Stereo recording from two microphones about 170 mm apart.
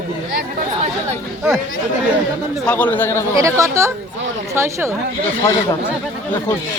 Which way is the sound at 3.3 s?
20° right (ahead or behind).